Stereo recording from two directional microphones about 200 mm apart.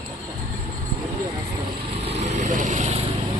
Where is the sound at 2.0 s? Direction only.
35° right (ahead or behind).